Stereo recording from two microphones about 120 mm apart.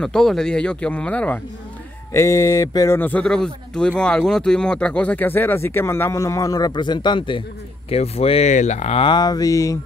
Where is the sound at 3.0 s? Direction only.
15° left (ahead or behind); by 7.4 s 45° left (ahead or behind).